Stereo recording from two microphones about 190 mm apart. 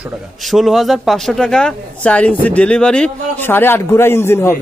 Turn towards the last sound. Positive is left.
turn(degrees=10)  # may be behind; listen again after turning